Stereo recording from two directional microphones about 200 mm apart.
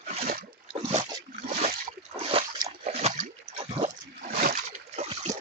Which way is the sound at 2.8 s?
30° right (ahead or behind).